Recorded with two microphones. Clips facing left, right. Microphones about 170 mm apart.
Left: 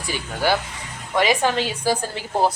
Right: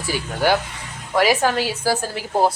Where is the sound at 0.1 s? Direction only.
15° right (ahead or behind).